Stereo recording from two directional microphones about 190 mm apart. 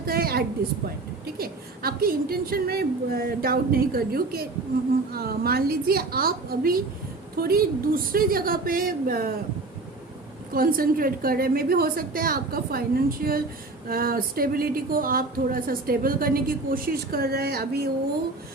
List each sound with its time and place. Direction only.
0.0 s a sound: 50° right (ahead or behind)
1.4 s speech: 50° right (ahead or behind)
10.5 s speech: 50° right (ahead or behind)